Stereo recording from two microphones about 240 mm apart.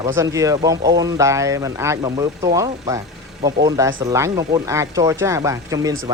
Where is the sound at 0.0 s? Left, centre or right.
Centre.